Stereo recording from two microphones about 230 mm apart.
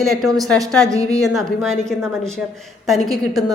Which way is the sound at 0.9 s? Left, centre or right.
Centre.